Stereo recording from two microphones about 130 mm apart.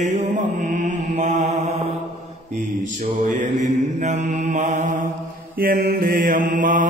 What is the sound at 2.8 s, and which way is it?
Mantra, 80° right.